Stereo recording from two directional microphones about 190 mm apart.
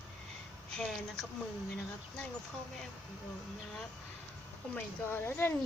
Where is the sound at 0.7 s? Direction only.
Centre (ahead or behind).